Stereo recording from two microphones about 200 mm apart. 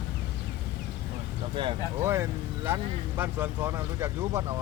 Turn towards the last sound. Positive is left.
turn(degrees=-15)  # may be behind; listen again after turning